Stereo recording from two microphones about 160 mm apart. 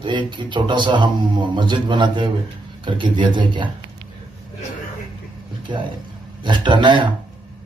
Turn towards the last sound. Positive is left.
turn(degrees=-30)  # may be behind; listen again after turning